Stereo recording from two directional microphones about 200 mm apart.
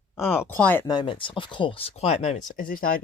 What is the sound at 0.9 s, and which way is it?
Speech, 25° left (ahead or behind).